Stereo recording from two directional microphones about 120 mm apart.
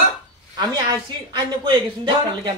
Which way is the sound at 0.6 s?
40° right (ahead or behind).